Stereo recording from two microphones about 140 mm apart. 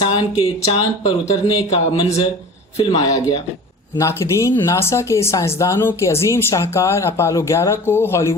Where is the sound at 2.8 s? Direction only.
25° left (ahead or behind).